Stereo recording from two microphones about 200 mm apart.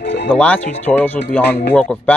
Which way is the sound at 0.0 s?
55° left (ahead or behind).